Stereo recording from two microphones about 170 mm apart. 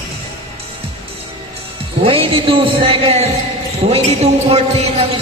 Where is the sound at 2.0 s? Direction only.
30° right (ahead or behind).